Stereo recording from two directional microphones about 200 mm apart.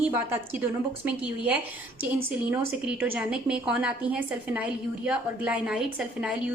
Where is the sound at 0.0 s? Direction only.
10° right (ahead or behind).